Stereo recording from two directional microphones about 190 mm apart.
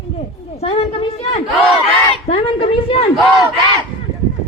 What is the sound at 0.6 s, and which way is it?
A woman's voice, 30° left (ahead or behind).